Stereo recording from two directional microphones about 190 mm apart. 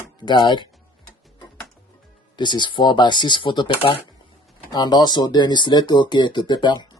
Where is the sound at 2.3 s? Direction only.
25° left (ahead or behind).